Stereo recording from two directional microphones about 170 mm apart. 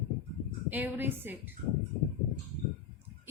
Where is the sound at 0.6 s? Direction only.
10° right (ahead or behind).